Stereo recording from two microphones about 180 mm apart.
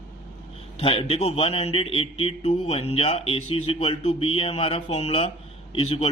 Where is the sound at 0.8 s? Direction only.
30° left (ahead or behind).